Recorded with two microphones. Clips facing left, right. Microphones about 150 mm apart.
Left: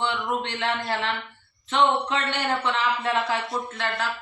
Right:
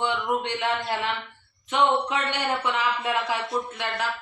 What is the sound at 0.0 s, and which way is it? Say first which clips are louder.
A man's voice: right 1 dB; 15° right (ahead or behind).